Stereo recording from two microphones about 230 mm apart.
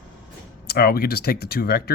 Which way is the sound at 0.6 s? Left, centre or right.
Left.